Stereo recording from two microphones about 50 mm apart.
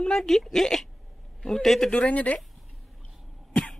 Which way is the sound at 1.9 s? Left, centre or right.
Left.